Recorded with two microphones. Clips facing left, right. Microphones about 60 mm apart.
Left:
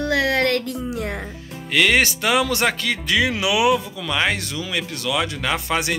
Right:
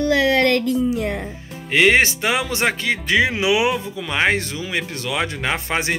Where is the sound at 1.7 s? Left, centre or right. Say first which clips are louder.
Right 3 dB; right.